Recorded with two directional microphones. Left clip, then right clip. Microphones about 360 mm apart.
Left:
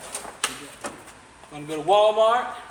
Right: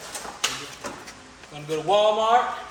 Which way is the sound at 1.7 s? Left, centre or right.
Left.